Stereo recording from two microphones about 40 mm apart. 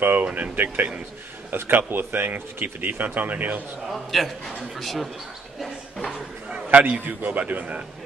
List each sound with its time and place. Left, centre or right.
0.0 s speech: right
3.8 s a man's voice: centre
6.5 s speech: right